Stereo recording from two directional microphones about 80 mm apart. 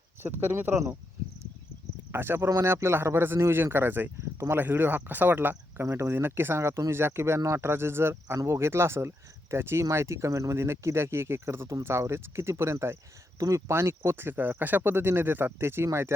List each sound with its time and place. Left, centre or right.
0.2 s speech: right
2.1 s speech: right